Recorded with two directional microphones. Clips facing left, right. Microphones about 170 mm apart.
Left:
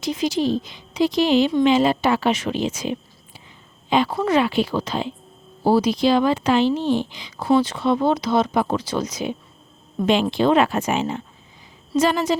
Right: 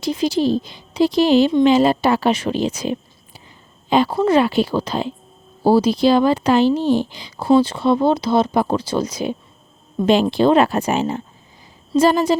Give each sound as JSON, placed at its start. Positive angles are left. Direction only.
{"t": 0.0, "sound": "speech", "side_deg": -35}
{"t": 10.3, "sound": "speech", "side_deg": -35}